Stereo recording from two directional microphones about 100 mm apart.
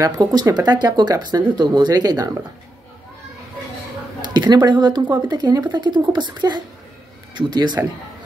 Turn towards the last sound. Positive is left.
turn(degrees=-45)  # may be behind; listen again after turning